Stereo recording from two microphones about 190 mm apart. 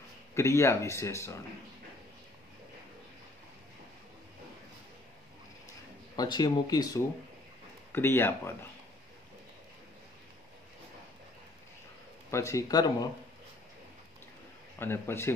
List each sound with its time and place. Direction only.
0.3 s speech: 15° left (ahead or behind)
6.1 s speech: 20° left (ahead or behind)
12.3 s speech: 15° left (ahead or behind)
14.8 s speech: 10° left (ahead or behind)